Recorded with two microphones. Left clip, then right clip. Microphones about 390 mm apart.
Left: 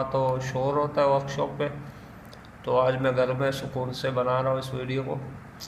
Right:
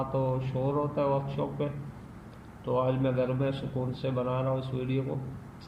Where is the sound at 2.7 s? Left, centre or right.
Centre.